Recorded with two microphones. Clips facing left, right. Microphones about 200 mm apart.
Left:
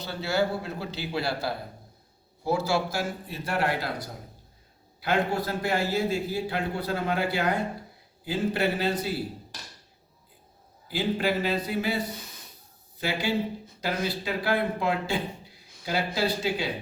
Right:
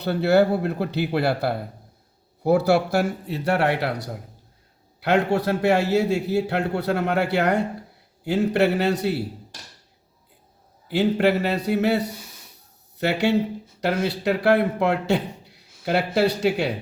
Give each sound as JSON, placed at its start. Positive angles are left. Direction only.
{"t": 0.0, "sound": "a man's voice", "side_deg": -60}
{"t": 10.8, "sound": "a man's voice", "side_deg": -70}